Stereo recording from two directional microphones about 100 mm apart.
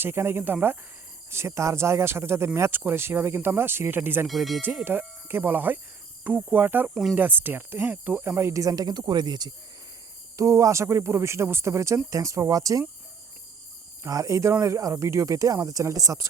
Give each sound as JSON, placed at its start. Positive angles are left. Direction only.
{"t": 0.0, "sound": "speech", "side_deg": -25}
{"t": 4.3, "sound": "speech", "side_deg": 0}
{"t": 4.9, "sound": "speech", "side_deg": -20}
{"t": 6.2, "sound": "cricket", "side_deg": -15}
{"t": 6.9, "sound": "speech", "side_deg": -5}
{"t": 7.2, "sound": "speech", "side_deg": -20}
{"t": 10.3, "sound": "speech", "side_deg": -35}
{"t": 14.0, "sound": "speech", "side_deg": -35}